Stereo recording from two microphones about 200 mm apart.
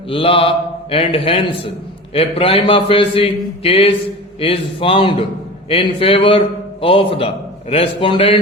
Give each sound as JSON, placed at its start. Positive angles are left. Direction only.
{"t": 0.1, "sound": "a man's voice", "side_deg": 25}